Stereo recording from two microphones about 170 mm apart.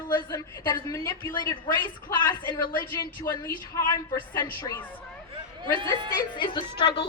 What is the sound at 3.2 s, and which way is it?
A woman's voice, 15° left (ahead or behind).